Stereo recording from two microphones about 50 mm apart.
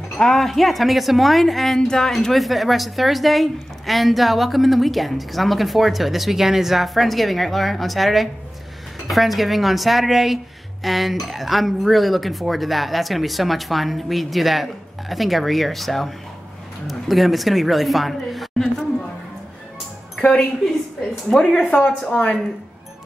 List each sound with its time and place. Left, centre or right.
0.2 s a woman's voice: centre
20.2 s a woman's voice: centre
22.1 s a woman's voice: centre